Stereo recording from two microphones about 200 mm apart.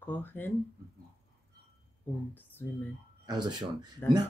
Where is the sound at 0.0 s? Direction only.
10° left (ahead or behind).